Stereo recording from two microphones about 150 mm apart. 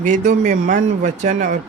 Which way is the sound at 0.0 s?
60° right (ahead or behind).